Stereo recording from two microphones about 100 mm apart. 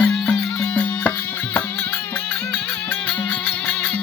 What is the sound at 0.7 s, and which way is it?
Music, 20° left (ahead or behind).